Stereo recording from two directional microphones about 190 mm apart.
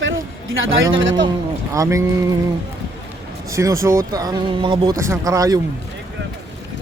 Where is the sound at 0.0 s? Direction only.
85° right.